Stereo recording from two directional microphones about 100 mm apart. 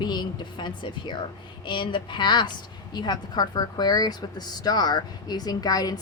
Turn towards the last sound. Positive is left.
turn(degrees=40)  # may be behind; listen again after turning